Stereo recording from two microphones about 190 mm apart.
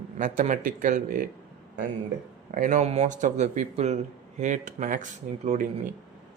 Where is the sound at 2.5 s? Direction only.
40° right (ahead or behind).